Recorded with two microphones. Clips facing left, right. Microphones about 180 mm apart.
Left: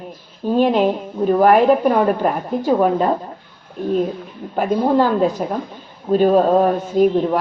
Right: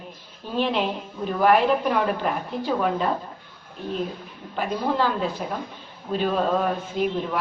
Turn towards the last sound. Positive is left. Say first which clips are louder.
# left 10 dB
turn(degrees=40)  # may be behind; listen again after turning